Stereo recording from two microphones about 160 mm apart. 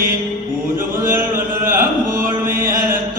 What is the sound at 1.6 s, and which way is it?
Music, 60° right (ahead or behind).